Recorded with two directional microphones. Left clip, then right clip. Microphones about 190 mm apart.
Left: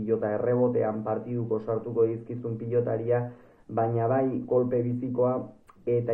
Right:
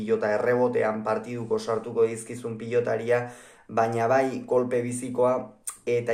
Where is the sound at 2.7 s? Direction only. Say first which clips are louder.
Right 2 dB; 20° right (ahead or behind).